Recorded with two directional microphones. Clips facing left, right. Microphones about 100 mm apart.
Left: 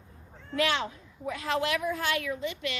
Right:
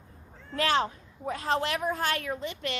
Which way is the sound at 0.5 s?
35° right (ahead or behind).